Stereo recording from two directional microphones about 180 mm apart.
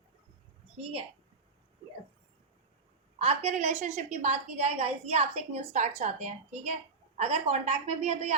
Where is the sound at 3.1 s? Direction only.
35° right (ahead or behind).